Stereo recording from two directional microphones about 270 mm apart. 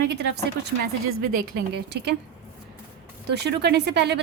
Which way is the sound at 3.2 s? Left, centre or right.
Right.